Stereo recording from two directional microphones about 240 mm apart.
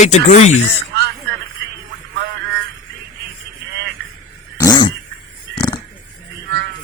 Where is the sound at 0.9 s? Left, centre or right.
Right.